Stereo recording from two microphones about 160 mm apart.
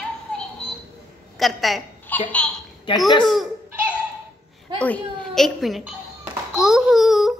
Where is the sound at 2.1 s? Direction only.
10° left (ahead or behind).